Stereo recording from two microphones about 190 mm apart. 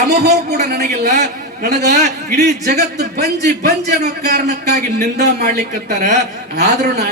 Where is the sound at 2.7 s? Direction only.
60° right (ahead or behind).